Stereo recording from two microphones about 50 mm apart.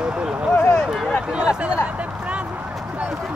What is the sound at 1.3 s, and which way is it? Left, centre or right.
Speech, right.